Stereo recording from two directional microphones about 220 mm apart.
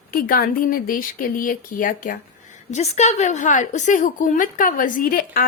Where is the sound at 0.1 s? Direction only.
40° left (ahead or behind).